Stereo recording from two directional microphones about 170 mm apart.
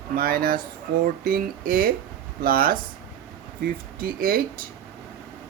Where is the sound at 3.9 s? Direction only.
60° right (ahead or behind).